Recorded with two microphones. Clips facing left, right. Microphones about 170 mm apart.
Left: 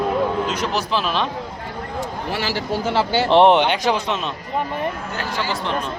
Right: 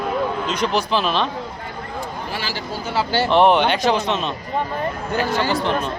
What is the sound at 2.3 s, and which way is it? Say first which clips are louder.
Speech: left 4 dB; 65° left (ahead or behind).